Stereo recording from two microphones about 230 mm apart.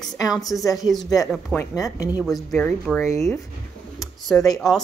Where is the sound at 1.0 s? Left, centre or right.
Centre.